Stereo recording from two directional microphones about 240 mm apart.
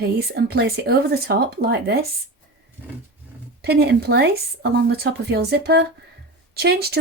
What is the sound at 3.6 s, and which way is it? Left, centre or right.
Speech, right.